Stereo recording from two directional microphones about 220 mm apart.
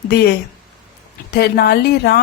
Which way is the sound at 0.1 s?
45° left (ahead or behind).